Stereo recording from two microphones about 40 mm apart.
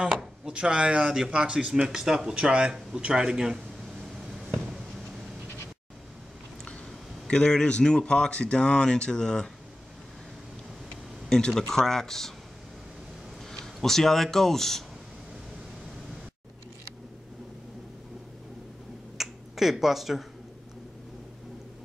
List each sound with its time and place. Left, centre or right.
0.0 s speech: centre
1.9 s speech: centre
7.2 s speech: centre
11.2 s speech: centre
13.7 s speech: centre
19.1 s finger snapping: centre